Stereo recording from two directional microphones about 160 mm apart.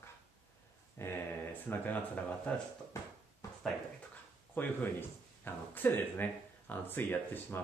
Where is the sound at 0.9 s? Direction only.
15° left (ahead or behind).